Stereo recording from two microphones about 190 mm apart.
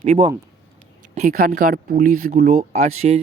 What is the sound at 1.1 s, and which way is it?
Speech, 50° right (ahead or behind).